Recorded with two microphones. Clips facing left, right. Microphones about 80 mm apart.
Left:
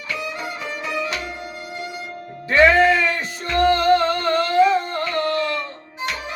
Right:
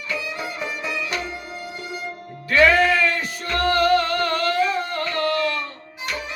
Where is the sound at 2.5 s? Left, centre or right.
Left.